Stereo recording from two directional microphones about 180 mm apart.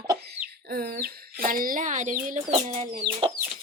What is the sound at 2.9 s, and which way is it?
Speech, 30° right (ahead or behind).